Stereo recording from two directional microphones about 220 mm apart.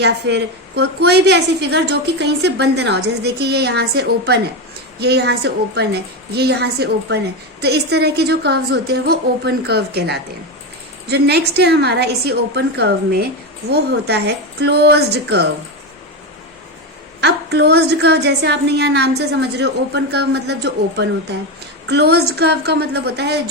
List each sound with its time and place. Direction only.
0.0 s a woman's voice: 50° right (ahead or behind)
17.2 s a woman's voice: 50° right (ahead or behind)